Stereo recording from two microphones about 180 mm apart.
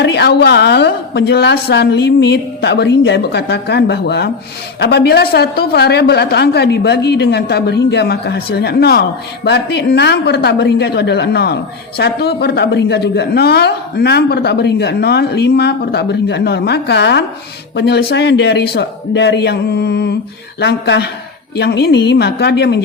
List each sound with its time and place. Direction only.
0.0 s a woman's voice: 65° left (ahead or behind)